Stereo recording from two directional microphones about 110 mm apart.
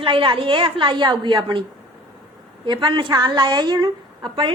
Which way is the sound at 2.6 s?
45° right (ahead or behind).